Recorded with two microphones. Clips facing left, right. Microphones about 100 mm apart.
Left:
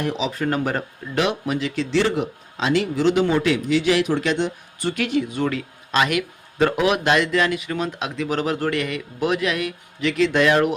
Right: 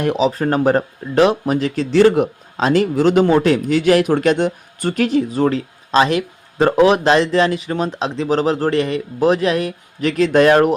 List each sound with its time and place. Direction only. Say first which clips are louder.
0.2 s speech: right 7 dB; 40° right (ahead or behind)